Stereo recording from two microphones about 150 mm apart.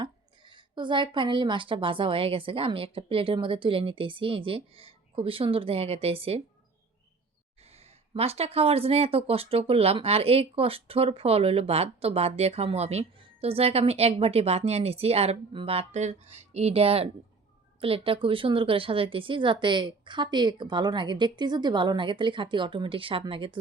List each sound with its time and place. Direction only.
0.0 s speech: 30° right (ahead or behind)
7.7 s speech: 40° right (ahead or behind)